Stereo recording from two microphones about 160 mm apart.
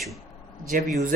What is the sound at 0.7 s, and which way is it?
Speech, 55° right (ahead or behind).